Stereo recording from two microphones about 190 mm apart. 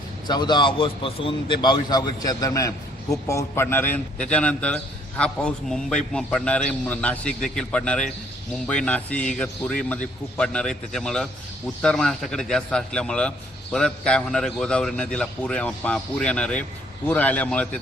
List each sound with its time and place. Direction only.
0.3 s a man's voice: 20° left (ahead or behind); by 17.7 s 5° left (ahead or behind)